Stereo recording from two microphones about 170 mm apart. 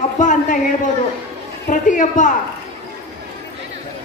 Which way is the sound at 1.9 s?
45° left (ahead or behind).